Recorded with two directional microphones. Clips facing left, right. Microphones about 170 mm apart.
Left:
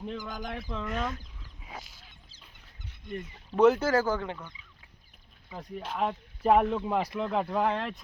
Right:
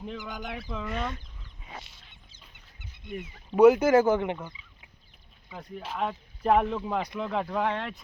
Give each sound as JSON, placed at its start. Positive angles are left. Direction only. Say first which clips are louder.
{"t": 0.0, "sound": "speech", "louder": "even", "side_deg": -5}
{"t": 1.6, "sound": "goose", "louder": "even", "side_deg": 0}
{"t": 3.1, "sound": "speech", "louder": "right 1 dB", "side_deg": -10}
{"t": 5.5, "sound": "speech", "louder": "left 1 dB", "side_deg": 0}